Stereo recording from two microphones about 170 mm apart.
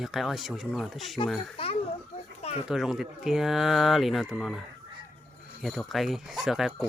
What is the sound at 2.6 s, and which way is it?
Speech, 5° right (ahead or behind).